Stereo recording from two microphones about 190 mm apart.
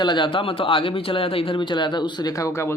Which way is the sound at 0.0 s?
25° left (ahead or behind).